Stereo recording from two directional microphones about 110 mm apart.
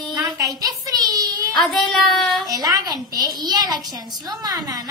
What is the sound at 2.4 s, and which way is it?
A woman's voice, 35° right (ahead or behind).